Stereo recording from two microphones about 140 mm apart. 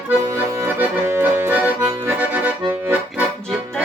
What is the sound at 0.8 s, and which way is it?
Accordion, 10° right (ahead or behind).